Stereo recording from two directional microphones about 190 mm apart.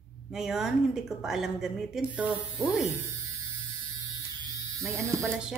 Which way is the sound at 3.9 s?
15° right (ahead or behind).